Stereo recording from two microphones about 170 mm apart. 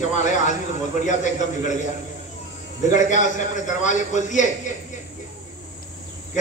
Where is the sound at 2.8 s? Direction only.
45° left (ahead or behind).